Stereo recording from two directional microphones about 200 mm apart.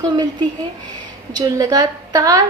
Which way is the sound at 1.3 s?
20° right (ahead or behind).